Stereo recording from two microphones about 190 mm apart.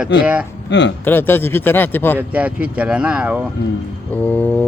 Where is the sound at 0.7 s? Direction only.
70° left (ahead or behind).